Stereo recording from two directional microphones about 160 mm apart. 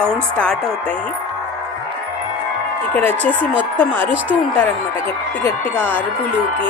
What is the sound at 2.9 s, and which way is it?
Speech, 10° left (ahead or behind).